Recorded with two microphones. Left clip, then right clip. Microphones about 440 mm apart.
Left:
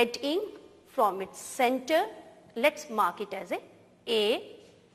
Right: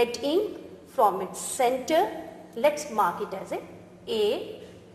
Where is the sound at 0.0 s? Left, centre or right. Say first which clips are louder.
Right 3 dB; left.